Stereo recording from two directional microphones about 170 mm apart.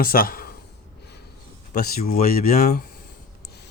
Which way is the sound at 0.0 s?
60° left (ahead or behind).